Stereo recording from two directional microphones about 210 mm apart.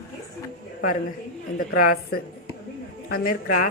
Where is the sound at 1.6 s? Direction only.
45° left (ahead or behind).